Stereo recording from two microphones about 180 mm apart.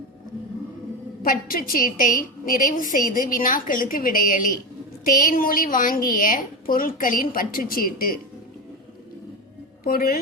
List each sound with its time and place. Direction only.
1.2 s a woman's voice: 50° left (ahead or behind)
9.8 s a woman's voice: 55° left (ahead or behind)